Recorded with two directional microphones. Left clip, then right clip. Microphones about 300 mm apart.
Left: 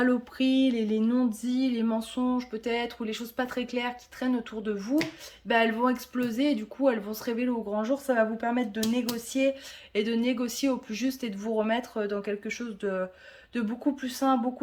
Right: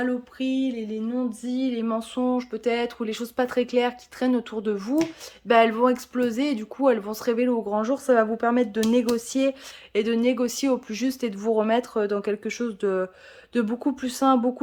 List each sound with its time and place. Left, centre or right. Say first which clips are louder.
0.0 s speech: left 1 dB; centre